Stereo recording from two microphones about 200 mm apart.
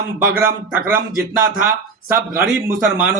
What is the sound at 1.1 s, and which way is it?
A man's voice, 45° right (ahead or behind).